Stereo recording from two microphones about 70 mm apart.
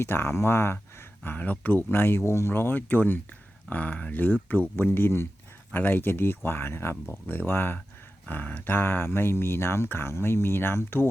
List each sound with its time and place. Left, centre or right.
0.0 s speech: left